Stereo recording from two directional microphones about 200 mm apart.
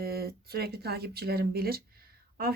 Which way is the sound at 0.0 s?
50° right (ahead or behind).